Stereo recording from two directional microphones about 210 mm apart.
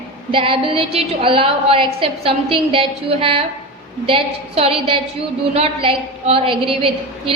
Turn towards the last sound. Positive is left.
turn(degrees=-25)  # may be behind; listen again after turning